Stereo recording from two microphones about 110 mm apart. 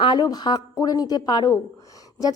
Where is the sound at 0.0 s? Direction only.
40° left (ahead or behind).